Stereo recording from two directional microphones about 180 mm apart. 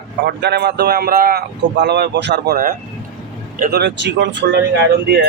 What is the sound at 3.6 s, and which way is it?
Speech, 65° right (ahead or behind).